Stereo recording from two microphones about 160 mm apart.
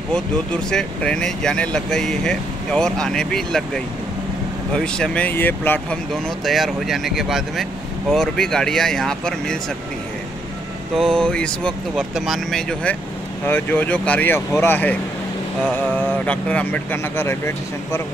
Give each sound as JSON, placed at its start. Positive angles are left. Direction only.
{"t": 0.7, "sound": "speech", "side_deg": 5}
{"t": 6.4, "sound": "speech", "side_deg": 0}
{"t": 11.0, "sound": "speech", "side_deg": 5}